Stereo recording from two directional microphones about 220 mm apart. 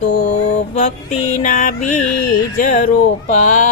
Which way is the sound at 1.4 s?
35° left (ahead or behind).